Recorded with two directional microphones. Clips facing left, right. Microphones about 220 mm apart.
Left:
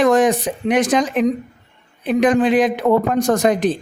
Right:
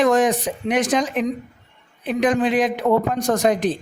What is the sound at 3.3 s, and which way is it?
Speech, 70° left (ahead or behind).